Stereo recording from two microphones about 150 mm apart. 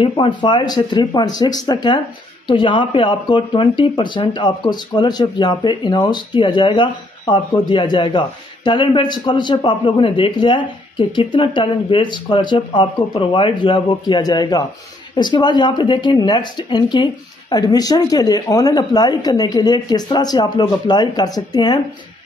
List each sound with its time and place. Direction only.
0.0 s speech: 35° left (ahead or behind)